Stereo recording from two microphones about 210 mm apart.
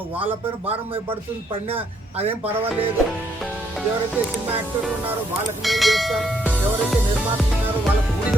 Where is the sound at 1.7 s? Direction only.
30° right (ahead or behind).